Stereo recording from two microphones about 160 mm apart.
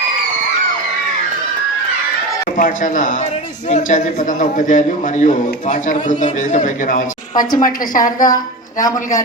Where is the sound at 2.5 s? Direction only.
55° left (ahead or behind).